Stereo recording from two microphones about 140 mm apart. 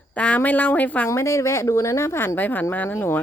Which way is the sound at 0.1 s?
10° left (ahead or behind).